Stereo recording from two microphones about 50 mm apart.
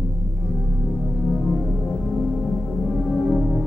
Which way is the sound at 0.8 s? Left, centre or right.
Centre.